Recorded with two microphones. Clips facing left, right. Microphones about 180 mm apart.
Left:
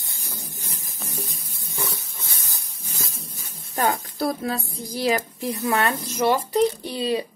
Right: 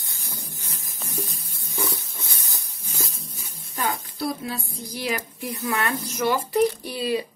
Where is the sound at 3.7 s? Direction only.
50° left (ahead or behind).